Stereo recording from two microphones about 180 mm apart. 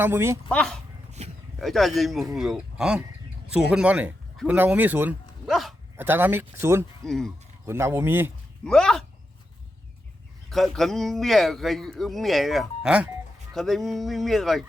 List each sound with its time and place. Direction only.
0.0 s speech: 15° right (ahead or behind)
0.5 s a man's voice: 5° left (ahead or behind)
1.2 s a sound: 35° right (ahead or behind)
1.6 s a man's voice: centre (ahead or behind)
6.0 s speech: 10° right (ahead or behind)
7.0 s a man's voice: 5° left (ahead or behind)
7.6 s speech: 15° right (ahead or behind)
8.6 s a man's voice: 5° left (ahead or behind)
10.5 s a man's voice: centre (ahead or behind)